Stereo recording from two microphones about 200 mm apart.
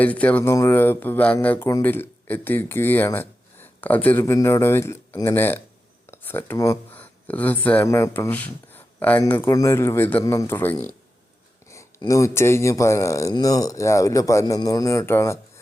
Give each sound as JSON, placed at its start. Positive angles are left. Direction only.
{"t": 0.0, "sound": "speech", "side_deg": 5}